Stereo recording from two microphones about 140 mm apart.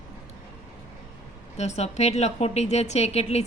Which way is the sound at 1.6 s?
50° left (ahead or behind).